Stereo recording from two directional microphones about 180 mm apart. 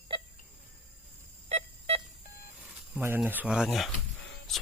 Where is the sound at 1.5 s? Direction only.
35° right (ahead or behind).